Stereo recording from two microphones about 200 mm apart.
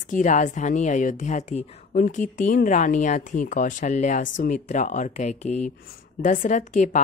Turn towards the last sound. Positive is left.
turn(degrees=35)  # may be behind; listen again after turning